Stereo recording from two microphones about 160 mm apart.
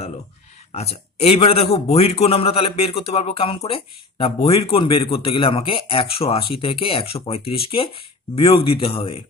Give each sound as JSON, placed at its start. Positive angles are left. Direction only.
{"t": 0.7, "sound": "speech", "side_deg": 40}